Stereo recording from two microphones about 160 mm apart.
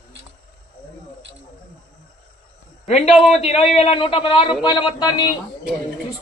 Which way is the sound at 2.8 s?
45° left (ahead or behind).